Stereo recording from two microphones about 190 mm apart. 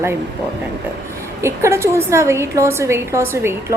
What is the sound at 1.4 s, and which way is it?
A woman's voice, 15° right (ahead or behind).